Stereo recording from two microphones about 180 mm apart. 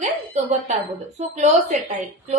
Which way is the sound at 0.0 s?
40° right (ahead or behind).